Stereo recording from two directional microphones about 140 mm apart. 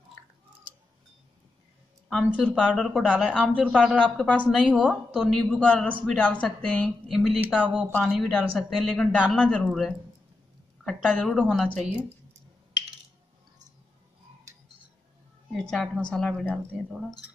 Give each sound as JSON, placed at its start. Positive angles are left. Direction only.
{"t": 2.4, "sound": "speech", "side_deg": 5}
{"t": 3.9, "sound": "speech", "side_deg": 10}
{"t": 7.6, "sound": "speech", "side_deg": 0}
{"t": 9.1, "sound": "speech", "side_deg": -5}
{"t": 9.4, "sound": "speech", "side_deg": 5}
{"t": 15.5, "sound": "speech", "side_deg": 5}